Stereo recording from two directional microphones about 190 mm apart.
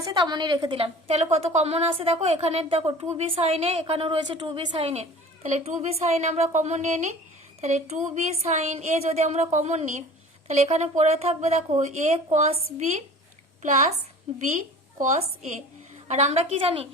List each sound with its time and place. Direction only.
0.0 s a woman's voice: 20° right (ahead or behind)
16.0 s a woman's voice: 35° right (ahead or behind)